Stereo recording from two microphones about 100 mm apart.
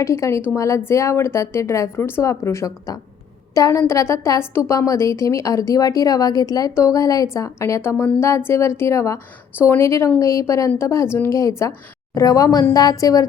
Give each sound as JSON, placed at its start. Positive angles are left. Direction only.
{"t": 0.0, "sound": "a woman's voice", "side_deg": 30}